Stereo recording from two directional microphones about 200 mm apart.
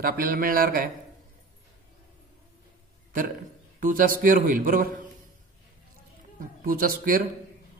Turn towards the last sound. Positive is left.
turn(degrees=-45)  # may be behind; listen again after turning